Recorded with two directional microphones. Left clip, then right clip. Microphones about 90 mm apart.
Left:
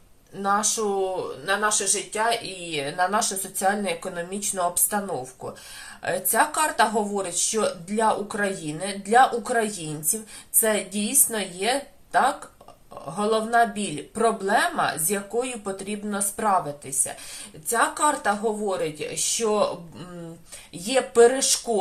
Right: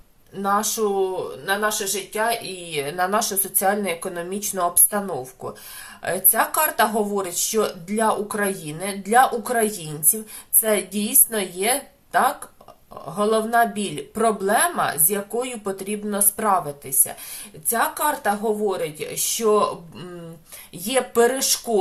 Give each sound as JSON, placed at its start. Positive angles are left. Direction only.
{"t": 0.3, "sound": "speech", "side_deg": -30}
{"t": 2.6, "sound": "speech", "side_deg": -45}
{"t": 17.7, "sound": "speech", "side_deg": -25}
{"t": 20.7, "sound": "speech", "side_deg": -40}